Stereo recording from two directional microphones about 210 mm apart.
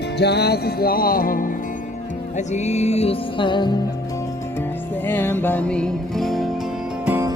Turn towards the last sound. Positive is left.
turn(degrees=-10)  # may be behind; listen again after turning